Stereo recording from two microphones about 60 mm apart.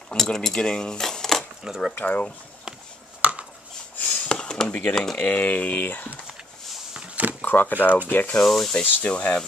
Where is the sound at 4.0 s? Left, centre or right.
Centre.